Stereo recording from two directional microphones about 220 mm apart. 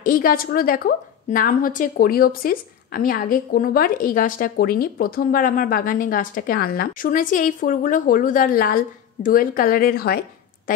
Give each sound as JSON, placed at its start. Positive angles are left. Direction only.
{"t": 0.0, "sound": "a woman's voice", "side_deg": 40}